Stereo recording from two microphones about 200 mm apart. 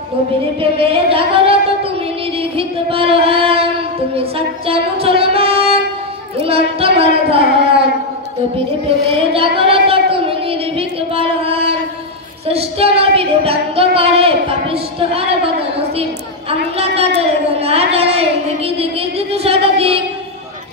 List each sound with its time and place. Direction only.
0.6 s singing: 25° right (ahead or behind)
2.3 s music: 30° right (ahead or behind)
4.2 s singing: 30° right (ahead or behind)
5.0 s music: 30° right (ahead or behind)
6.4 s child singing: 30° right (ahead or behind)
8.8 s singing: 30° right (ahead or behind)
12.4 s a sound: 30° right (ahead or behind)
16.0 s a woman's voice: 30° right (ahead or behind)
17.2 s a sound: 30° right (ahead or behind)